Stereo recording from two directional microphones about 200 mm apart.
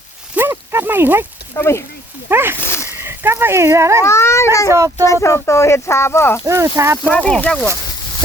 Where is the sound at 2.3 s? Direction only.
10° right (ahead or behind).